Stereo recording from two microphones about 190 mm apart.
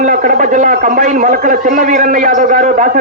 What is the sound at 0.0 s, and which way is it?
A man's voice, 45° right (ahead or behind).